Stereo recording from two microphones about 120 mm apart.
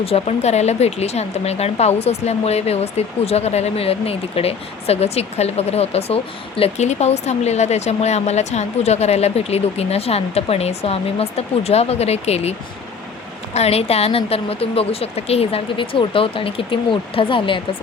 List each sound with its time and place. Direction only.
0.0 s a woman's voice: 60° left (ahead or behind)